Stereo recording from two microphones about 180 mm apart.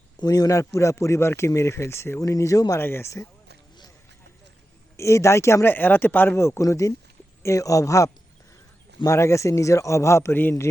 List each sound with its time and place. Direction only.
0.2 s speech: 20° left (ahead or behind)
4.9 s speech: 15° left (ahead or behind)